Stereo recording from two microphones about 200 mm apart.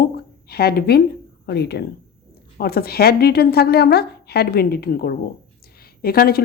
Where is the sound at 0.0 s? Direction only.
50° left (ahead or behind).